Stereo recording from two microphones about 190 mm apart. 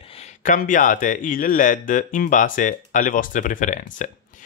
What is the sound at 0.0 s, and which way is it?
A man's voice, 30° left (ahead or behind).